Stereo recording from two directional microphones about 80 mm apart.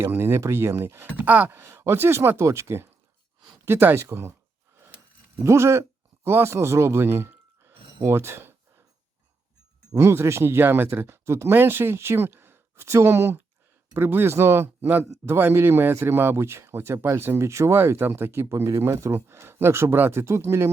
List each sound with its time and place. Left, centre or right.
0.0 s speech: right
1.2 s speech: centre
1.5 s speech: right
5.4 s speech: right
8.0 s a sound: right
9.9 s speech: right